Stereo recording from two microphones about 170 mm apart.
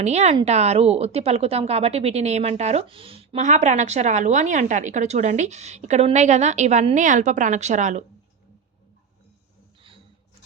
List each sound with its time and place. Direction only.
0.0 s speech: 40° right (ahead or behind)